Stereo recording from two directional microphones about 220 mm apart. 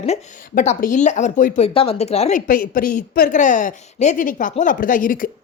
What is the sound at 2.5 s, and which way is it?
A woman's voice, 40° left (ahead or behind).